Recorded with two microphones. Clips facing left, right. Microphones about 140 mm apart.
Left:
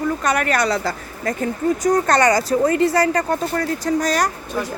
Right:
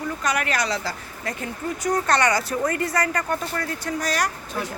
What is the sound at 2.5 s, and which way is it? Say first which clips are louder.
Speech: left 8 dB; 25° left (ahead or behind).